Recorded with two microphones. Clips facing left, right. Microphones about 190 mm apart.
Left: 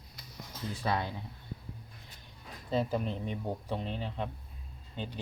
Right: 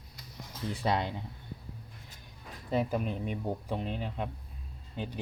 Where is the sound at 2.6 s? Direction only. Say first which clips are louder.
Right 1 dB; 10° right (ahead or behind).